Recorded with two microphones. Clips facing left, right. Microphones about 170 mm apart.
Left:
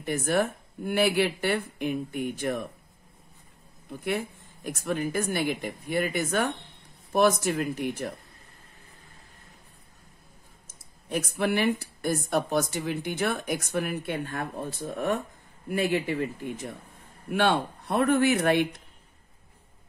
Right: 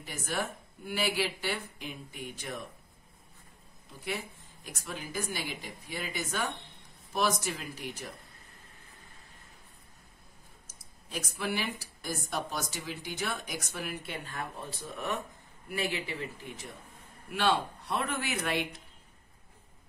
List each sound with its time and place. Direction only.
0.0 s speech: 60° left (ahead or behind)
4.0 s speech: 55° left (ahead or behind)
11.1 s speech: 60° left (ahead or behind)